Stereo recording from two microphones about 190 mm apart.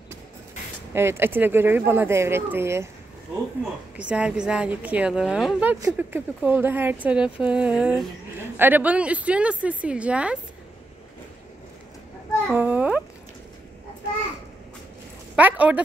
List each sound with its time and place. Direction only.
0.9 s a woman's voice: 10° right (ahead or behind)
3.9 s a woman's voice: 5° right (ahead or behind)
12.5 s a woman's voice: 10° right (ahead or behind)
15.3 s speech: 5° right (ahead or behind)